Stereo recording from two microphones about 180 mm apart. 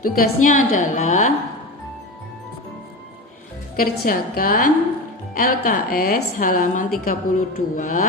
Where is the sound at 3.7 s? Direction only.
55° left (ahead or behind).